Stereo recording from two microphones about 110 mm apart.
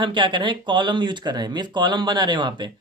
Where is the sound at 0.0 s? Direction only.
45° right (ahead or behind).